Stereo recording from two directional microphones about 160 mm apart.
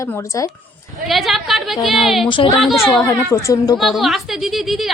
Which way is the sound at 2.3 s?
30° left (ahead or behind).